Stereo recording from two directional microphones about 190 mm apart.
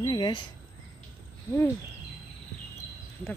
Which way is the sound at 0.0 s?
20° left (ahead or behind).